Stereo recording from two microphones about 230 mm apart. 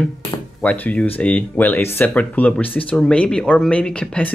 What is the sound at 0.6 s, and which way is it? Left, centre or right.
Speech, centre.